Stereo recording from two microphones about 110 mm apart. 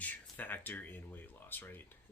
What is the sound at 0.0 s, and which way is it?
Speech, 15° left (ahead or behind).